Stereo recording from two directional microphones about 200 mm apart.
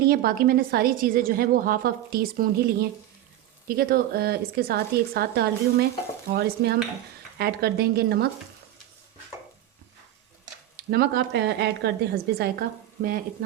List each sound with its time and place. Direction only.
0.0 s a woman's voice: 50° right (ahead or behind)
6.3 s stir: 55° right (ahead or behind)
7.3 s a woman's voice: 50° right (ahead or behind)
10.8 s a woman's voice: 50° right (ahead or behind)